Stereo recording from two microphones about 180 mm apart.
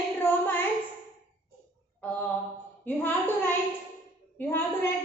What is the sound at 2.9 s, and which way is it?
A woman's voice, 10° left (ahead or behind).